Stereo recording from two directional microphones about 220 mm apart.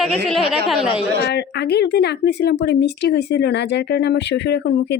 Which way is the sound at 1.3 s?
50° left (ahead or behind).